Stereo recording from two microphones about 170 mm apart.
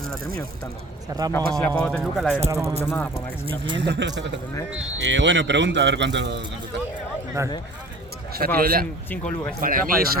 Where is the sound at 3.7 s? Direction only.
90° right.